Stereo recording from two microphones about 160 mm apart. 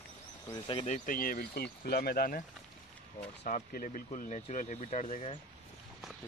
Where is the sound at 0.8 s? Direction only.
50° left (ahead or behind).